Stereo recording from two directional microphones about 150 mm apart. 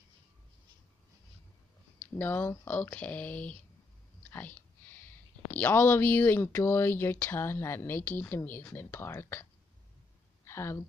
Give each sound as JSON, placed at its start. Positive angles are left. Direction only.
{"t": 2.0, "sound": "speech", "side_deg": 15}
{"t": 4.3, "sound": "whispering", "side_deg": 10}
{"t": 5.5, "sound": "speech", "side_deg": 15}
{"t": 10.4, "sound": "a sound", "side_deg": 15}